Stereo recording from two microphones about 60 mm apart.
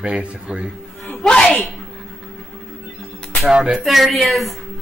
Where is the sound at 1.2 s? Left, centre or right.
Centre.